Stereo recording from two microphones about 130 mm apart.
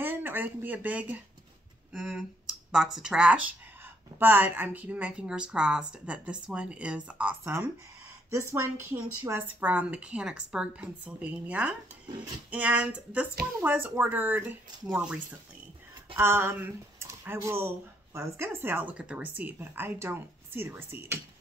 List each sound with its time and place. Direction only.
0.0 s speech: 15° right (ahead or behind)
16.2 s speech: 20° right (ahead or behind)